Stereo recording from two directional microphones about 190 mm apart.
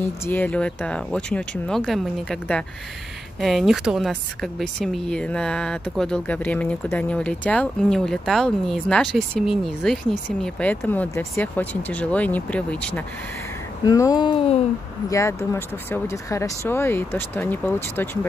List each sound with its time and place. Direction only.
0.2 s speech: 10° left (ahead or behind)
13.8 s speech: 20° left (ahead or behind)
15.0 s speech: 15° left (ahead or behind)